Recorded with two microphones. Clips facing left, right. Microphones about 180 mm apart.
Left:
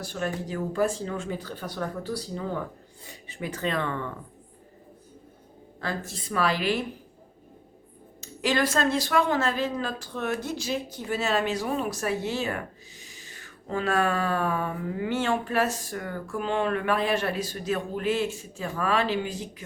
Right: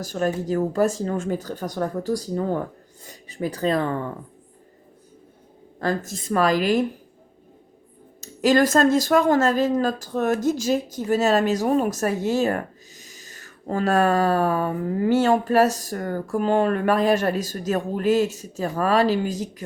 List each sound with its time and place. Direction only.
0.0 s speech: 40° right (ahead or behind)
5.8 s speech: 45° right (ahead or behind)
8.2 s speech: 45° right (ahead or behind)